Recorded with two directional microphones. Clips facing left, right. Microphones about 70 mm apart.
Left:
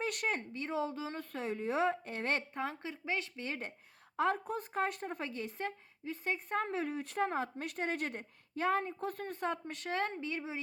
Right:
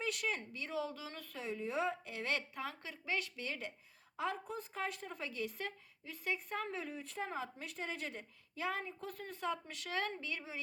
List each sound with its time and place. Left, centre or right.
0.0 s speech: left
4.2 s speech: left
6.8 s a woman's voice: left